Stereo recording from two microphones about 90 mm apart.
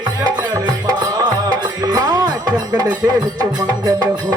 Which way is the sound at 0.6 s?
50° right (ahead or behind).